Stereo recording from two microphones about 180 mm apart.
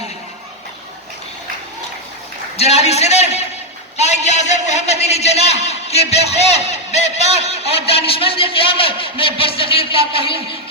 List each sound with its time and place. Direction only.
2.6 s a man's voice: 35° left (ahead or behind)